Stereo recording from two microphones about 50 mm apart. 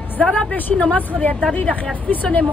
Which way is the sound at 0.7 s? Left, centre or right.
Left.